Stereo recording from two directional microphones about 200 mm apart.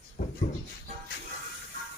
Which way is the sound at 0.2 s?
40° left (ahead or behind).